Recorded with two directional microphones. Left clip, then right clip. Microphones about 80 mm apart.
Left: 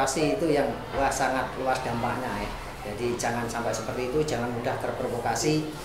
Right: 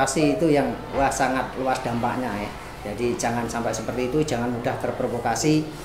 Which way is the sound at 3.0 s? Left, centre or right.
Right.